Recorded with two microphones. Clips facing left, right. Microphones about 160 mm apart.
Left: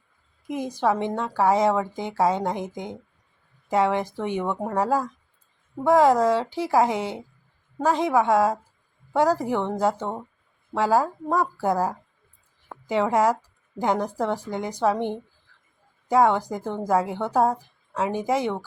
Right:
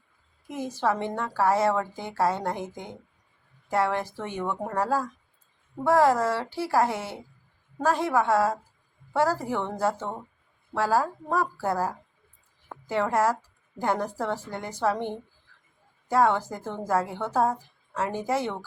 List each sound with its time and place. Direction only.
0.4 s a woman's voice: 15° left (ahead or behind)